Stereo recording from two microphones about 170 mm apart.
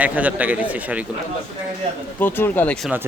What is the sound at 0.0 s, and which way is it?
A man's voice, 10° right (ahead or behind).